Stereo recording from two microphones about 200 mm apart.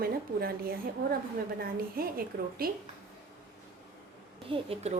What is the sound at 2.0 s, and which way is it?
Speech, 45° right (ahead or behind).